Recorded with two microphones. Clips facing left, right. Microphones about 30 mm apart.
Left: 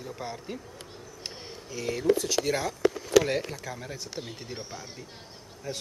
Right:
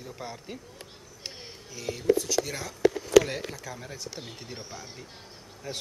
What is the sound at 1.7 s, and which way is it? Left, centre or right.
Speech, centre.